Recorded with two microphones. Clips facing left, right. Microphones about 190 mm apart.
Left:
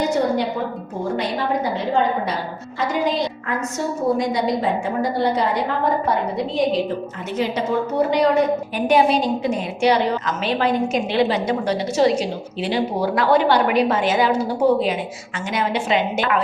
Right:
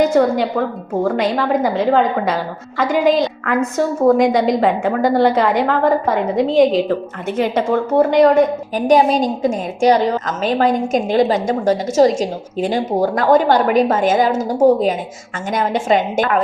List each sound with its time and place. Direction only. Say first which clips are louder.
1.0 s a woman's voice: right 5 dB; 90° right
7.3 s a woman's voice: right 4 dB; 55° right (ahead or behind)